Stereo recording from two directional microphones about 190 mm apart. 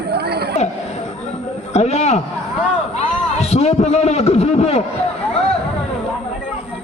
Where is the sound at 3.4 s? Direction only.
35° left (ahead or behind).